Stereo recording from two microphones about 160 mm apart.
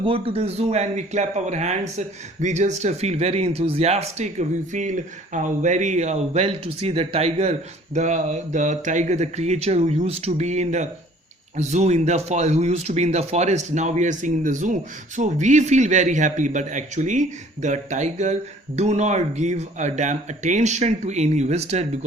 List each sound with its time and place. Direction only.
0.0 s speech: 35° right (ahead or behind)